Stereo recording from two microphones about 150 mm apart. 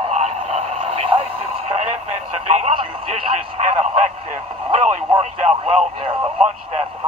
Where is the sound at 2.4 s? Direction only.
45° right (ahead or behind).